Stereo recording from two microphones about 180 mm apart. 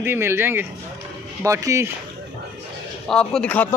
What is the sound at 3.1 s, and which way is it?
Speech, 5° left (ahead or behind).